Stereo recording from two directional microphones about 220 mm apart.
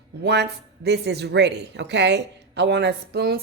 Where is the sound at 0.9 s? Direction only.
50° right (ahead or behind).